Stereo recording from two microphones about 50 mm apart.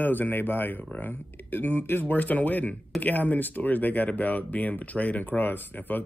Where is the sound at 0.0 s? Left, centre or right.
Left.